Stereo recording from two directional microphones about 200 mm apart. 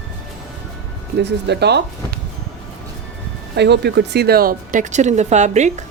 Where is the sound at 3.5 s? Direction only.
60° right (ahead or behind); by 5.9 s 35° right (ahead or behind).